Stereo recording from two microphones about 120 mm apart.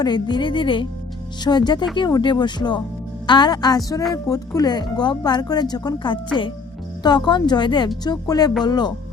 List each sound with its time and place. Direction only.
0.0 s speech: 40° left (ahead or behind)